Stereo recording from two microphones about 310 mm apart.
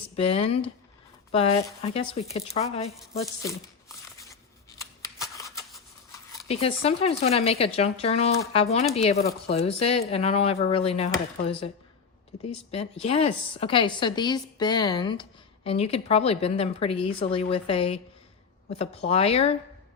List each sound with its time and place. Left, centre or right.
0.2 s a woman's voice: centre
3.4 s a sound: centre
4.8 s shuffling cards: centre
6.5 s a woman's voice: centre